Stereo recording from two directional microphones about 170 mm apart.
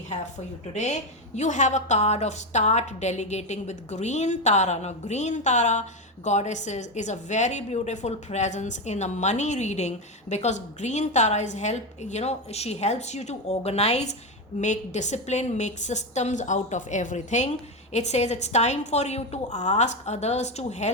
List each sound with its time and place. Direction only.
0.7 s a woman's voice: 40° left (ahead or behind)